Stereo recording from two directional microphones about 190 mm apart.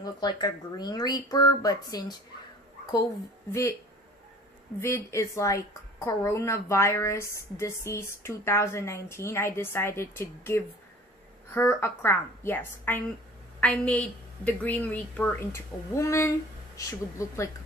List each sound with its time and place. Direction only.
0.0 s speech: 20° left (ahead or behind)
4.7 s a woman's voice: 15° left (ahead or behind)